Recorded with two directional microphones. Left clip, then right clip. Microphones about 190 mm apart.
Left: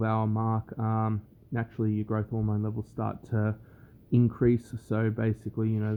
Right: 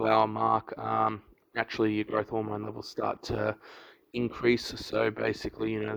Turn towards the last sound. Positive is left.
turn(degrees=-35)  # may be behind; listen again after turning